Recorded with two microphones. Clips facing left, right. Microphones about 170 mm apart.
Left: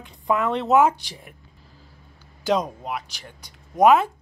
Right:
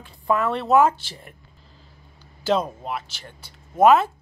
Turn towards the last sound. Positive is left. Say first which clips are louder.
# even
turn(degrees=15)  # may be behind; listen again after turning